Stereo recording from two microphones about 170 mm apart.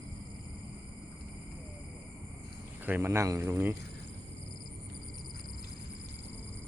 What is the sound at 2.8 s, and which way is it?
Speech, 10° right (ahead or behind).